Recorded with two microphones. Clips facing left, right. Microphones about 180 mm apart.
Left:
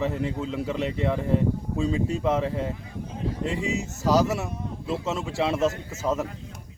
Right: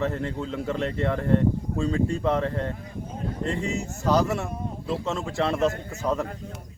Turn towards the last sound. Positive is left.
turn(degrees=0)  # may be behind; listen again after turning